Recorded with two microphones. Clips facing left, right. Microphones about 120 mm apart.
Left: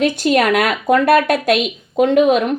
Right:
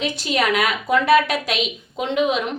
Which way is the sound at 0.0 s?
55° left (ahead or behind).